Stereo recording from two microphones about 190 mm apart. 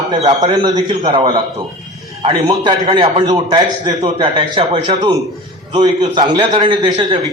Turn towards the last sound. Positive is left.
turn(degrees=-25)  # may be behind; listen again after turning